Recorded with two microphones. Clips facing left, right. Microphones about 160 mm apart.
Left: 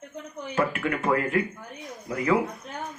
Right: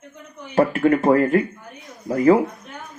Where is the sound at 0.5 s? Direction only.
35° right (ahead or behind).